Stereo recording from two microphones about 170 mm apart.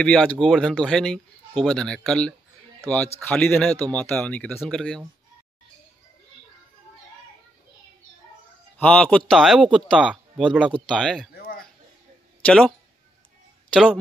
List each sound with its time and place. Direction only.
0.0 s speech: 5° left (ahead or behind)
8.7 s speech: 5° left (ahead or behind)
11.3 s a sound: 60° left (ahead or behind)
12.4 s speech: 5° left (ahead or behind)